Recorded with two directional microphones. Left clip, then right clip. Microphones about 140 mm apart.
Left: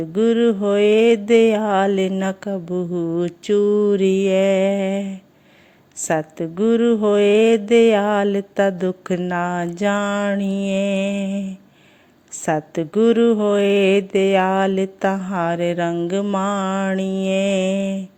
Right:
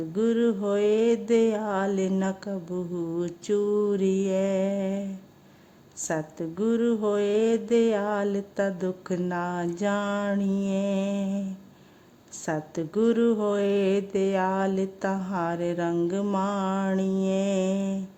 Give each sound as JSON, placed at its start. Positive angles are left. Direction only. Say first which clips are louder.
{"t": 0.1, "sound": "mantra", "louder": "left 8 dB", "side_deg": 15}
{"t": 6.4, "sound": "mantra", "louder": "left 7 dB", "side_deg": 20}
{"t": 12.5, "sound": "a woman's voice", "louder": "left 9 dB", "side_deg": 25}
{"t": 12.9, "sound": "mantra", "louder": "left 8 dB", "side_deg": 15}